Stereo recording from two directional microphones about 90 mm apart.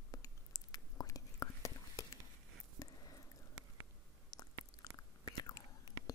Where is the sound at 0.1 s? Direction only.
40° left (ahead or behind).